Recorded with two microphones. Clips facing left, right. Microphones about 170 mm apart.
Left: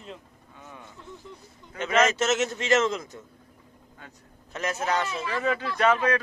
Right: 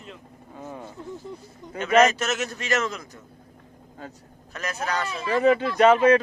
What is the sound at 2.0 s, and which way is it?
A man's voice, 25° left (ahead or behind).